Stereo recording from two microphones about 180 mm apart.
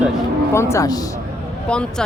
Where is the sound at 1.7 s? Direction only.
5° left (ahead or behind).